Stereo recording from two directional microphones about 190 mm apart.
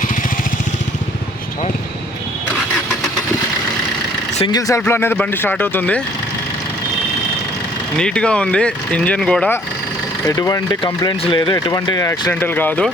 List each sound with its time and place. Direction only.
4.4 s speech: 20° left (ahead or behind)
7.9 s speech: 5° left (ahead or behind)
10.2 s speech: 20° left (ahead or behind)